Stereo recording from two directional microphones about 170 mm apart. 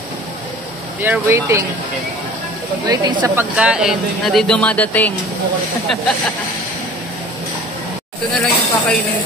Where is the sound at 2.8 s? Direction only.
25° right (ahead or behind).